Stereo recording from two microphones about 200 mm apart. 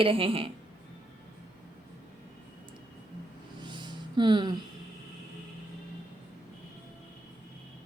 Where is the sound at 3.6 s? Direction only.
20° right (ahead or behind).